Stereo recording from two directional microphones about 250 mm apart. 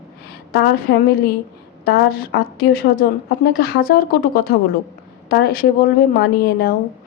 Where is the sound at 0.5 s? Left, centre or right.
Left.